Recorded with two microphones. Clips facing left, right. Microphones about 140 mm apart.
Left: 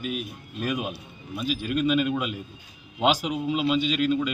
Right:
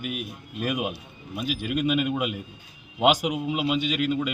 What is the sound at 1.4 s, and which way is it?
Speech, 60° right (ahead or behind).